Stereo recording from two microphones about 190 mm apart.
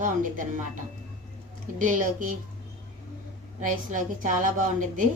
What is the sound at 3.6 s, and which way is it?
Speech, 45° right (ahead or behind).